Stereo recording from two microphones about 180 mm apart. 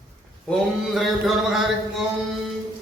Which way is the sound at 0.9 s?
Centre (ahead or behind).